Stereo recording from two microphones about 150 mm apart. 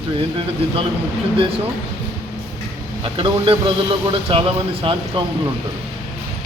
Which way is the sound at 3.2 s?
35° right (ahead or behind).